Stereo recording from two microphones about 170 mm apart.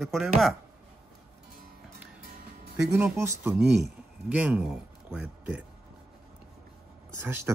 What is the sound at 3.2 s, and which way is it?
Speech, 15° right (ahead or behind).